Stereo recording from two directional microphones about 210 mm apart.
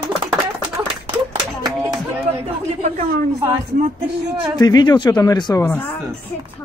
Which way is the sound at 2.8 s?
40° right (ahead or behind).